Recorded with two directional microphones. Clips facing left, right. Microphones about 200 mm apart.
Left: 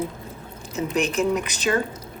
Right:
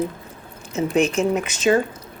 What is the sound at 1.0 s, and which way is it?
Speech, 35° left (ahead or behind).